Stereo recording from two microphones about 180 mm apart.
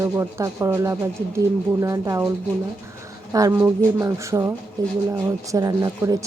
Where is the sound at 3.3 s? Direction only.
20° right (ahead or behind).